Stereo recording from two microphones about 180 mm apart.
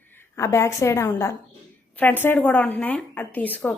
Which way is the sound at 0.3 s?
15° left (ahead or behind).